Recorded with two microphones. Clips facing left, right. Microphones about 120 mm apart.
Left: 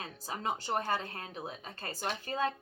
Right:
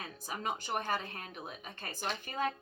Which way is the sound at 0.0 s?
30° left (ahead or behind).